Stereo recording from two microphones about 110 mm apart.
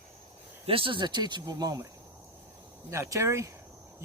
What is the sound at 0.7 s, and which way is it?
Speech, 55° right (ahead or behind).